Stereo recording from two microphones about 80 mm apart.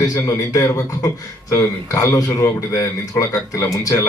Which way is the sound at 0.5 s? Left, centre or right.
Left.